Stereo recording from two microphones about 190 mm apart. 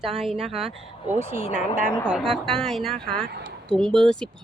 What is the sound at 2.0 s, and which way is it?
Speech, centre (ahead or behind).